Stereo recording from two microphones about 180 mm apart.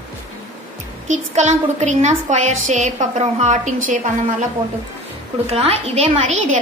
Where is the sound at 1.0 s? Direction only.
40° right (ahead or behind).